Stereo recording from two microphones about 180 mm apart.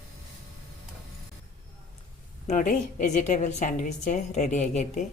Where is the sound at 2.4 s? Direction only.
45° left (ahead or behind).